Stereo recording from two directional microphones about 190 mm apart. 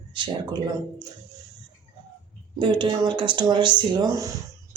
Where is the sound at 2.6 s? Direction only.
25° right (ahead or behind).